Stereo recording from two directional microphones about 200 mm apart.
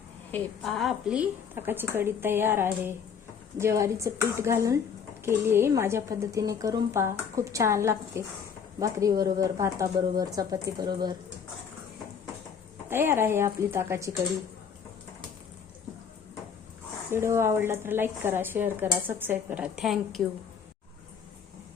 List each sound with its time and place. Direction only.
0.3 s a woman's voice: 5° left (ahead or behind); by 11.2 s 20° right (ahead or behind)
12.9 s a woman's voice: 10° right (ahead or behind)
17.1 s a woman's voice: 15° right (ahead or behind)